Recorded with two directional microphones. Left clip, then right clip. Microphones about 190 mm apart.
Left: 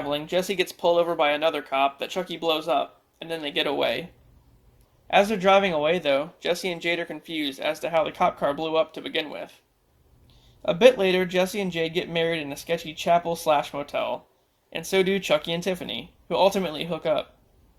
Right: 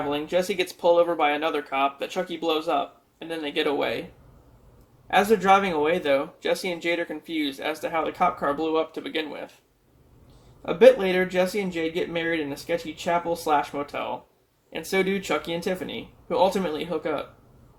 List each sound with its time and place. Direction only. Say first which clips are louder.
0.1 s speech: left 1 dB; 35° left (ahead or behind)
5.1 s speech: even; 30° left (ahead or behind)
10.7 s speech: right 1 dB; 40° left (ahead or behind)